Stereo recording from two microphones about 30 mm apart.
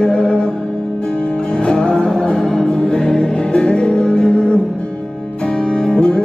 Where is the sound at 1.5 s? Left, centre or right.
Left.